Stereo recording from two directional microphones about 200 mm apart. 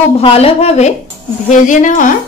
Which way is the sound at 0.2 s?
30° left (ahead or behind).